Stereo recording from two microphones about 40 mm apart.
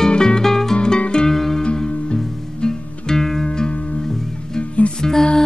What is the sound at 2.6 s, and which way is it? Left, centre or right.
Music, centre.